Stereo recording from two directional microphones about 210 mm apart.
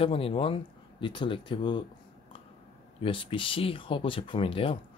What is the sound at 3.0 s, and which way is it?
Speech, 25° left (ahead or behind).